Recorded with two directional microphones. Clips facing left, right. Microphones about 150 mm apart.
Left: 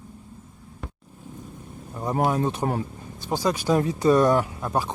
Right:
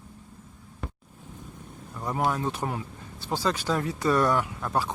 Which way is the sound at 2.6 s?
40° left (ahead or behind).